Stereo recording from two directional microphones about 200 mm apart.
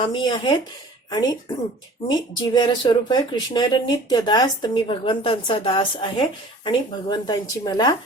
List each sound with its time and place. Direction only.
0.0 s speech: 25° left (ahead or behind)
2.0 s speech: 25° left (ahead or behind)